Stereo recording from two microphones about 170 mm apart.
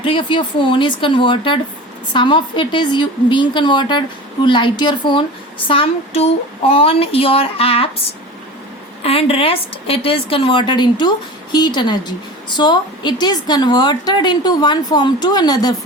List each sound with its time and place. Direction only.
0.0 s a woman's voice: 30° left (ahead or behind)
9.0 s a woman's voice: 35° left (ahead or behind)